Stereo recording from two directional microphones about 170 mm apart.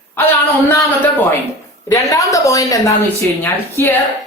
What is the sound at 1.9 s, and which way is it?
A woman's voice, 20° left (ahead or behind).